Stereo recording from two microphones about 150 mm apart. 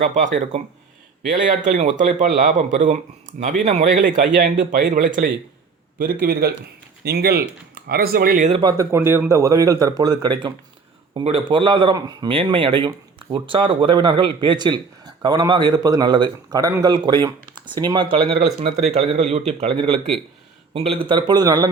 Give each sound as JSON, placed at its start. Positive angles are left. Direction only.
{"t": 0.0, "sound": "a man's voice", "side_deg": -55}
{"t": 6.0, "sound": "a man's voice", "side_deg": -80}
{"t": 8.6, "sound": "speech", "side_deg": -20}